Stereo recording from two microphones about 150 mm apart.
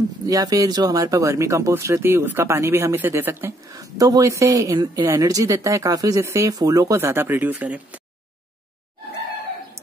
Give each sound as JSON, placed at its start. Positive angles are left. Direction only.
{"t": 0.3, "sound": "speech", "side_deg": -25}